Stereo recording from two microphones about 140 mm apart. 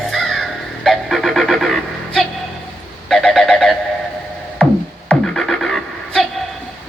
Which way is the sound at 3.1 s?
5° left (ahead or behind).